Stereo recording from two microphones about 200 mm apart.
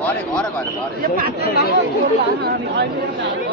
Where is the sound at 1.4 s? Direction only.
50° left (ahead or behind).